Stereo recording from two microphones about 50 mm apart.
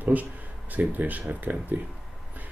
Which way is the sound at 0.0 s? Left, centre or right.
Right.